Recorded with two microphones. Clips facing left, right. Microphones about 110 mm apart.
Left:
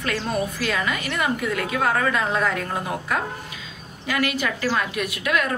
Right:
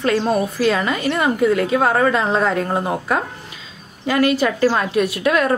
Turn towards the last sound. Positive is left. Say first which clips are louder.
# right 7 dB
turn(degrees=-35)  # may be behind; listen again after turning